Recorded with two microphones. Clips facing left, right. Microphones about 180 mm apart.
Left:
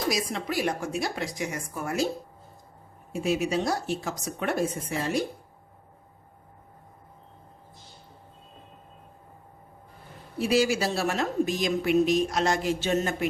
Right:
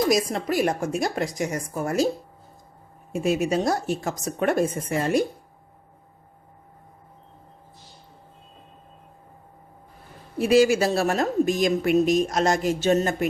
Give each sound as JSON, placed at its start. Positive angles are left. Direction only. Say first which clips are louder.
{"t": 0.1, "sound": "a woman's voice", "louder": "right 6 dB", "side_deg": -45}
{"t": 3.1, "sound": "a woman's voice", "louder": "right 4 dB", "side_deg": -50}
{"t": 10.3, "sound": "a woman's voice", "louder": "right 6 dB", "side_deg": -50}